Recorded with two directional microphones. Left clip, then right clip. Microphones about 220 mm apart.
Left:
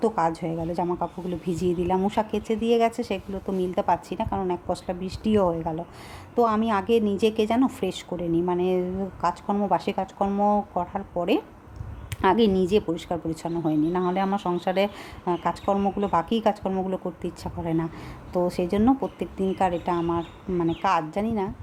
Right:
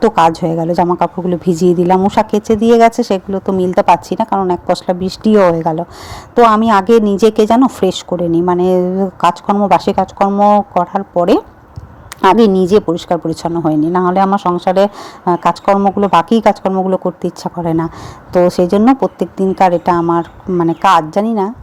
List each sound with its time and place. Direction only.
0.0 s speech: 25° right (ahead or behind)